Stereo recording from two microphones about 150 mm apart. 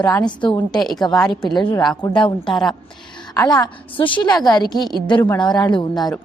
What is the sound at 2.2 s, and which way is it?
Speech, 35° left (ahead or behind).